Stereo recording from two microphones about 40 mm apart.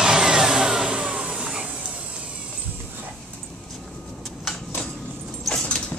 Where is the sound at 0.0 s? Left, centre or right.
Centre.